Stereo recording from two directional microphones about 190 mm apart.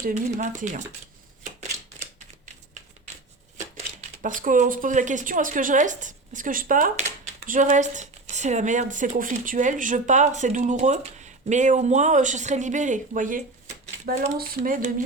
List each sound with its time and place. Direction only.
0.0 s speech: 40° right (ahead or behind)
4.2 s a woman's voice: 45° right (ahead or behind)
13.8 s a sound: 40° right (ahead or behind)
14.3 s a woman's voice: 50° right (ahead or behind)